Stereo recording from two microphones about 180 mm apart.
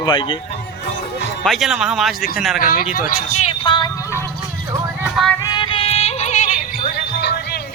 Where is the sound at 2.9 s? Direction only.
50° left (ahead or behind); by 3.9 s 25° left (ahead or behind).